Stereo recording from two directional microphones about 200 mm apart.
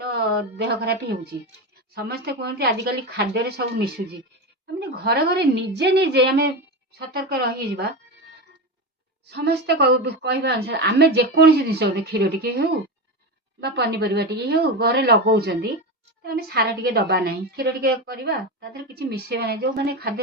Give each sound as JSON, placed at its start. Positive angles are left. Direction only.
{"t": 0.0, "sound": "a woman's voice", "side_deg": -55}
{"t": 9.2, "sound": "a woman's voice", "side_deg": -55}